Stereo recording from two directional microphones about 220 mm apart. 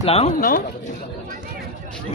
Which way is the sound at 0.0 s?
25° left (ahead or behind).